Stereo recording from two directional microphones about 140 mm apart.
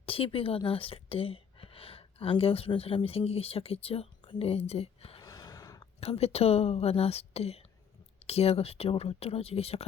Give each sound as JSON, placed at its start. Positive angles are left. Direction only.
{"t": 0.0, "sound": "speech", "side_deg": 40}
{"t": 5.2, "sound": "gasp", "side_deg": 25}
{"t": 6.0, "sound": "a woman's voice", "side_deg": 45}